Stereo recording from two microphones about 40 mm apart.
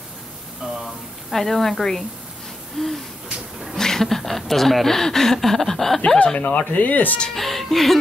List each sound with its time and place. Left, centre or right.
1.3 s speech: centre
6.2 s speech: left
7.3 s speech: centre